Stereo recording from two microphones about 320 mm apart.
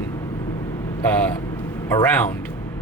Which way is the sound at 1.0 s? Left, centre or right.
Centre.